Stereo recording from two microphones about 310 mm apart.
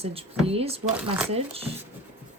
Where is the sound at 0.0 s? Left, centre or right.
Centre.